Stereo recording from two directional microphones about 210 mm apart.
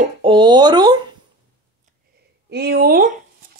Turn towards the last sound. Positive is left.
turn(degrees=-45)  # may be behind; listen again after turning